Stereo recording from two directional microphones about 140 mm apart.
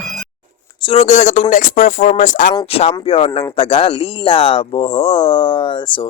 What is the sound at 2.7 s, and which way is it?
Speech, 45° left (ahead or behind).